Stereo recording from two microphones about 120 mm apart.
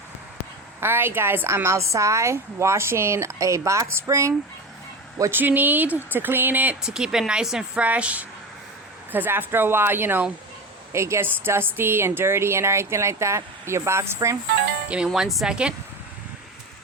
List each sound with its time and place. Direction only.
0.8 s a woman's voice: 20° right (ahead or behind)
14.8 s speech: 5° right (ahead or behind)